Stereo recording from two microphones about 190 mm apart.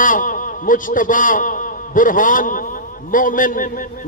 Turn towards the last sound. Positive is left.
turn(degrees=45)  # may be behind; listen again after turning